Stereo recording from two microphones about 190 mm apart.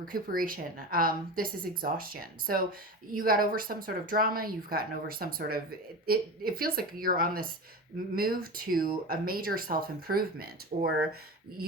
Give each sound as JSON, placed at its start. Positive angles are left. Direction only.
{"t": 0.0, "sound": "a woman's voice", "side_deg": -50}
{"t": 10.7, "sound": "speech", "side_deg": -40}